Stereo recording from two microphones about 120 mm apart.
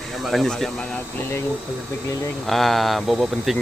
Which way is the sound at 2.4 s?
Centre (ahead or behind).